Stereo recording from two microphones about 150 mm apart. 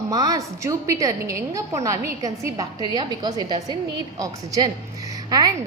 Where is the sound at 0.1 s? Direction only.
25° right (ahead or behind).